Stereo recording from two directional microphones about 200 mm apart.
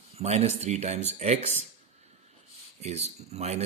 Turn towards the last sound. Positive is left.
turn(degrees=-35)  # may be behind; listen again after turning